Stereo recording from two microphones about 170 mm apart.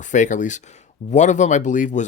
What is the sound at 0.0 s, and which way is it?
Speech, 45° left (ahead or behind).